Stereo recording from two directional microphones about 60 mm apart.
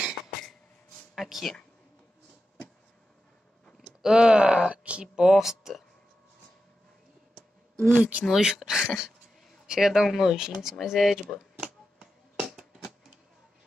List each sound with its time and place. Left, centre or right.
1.1 s speech: centre
3.8 s speech: centre
7.9 s speech: right
8.3 s speech: centre
12.0 s finger snapping: centre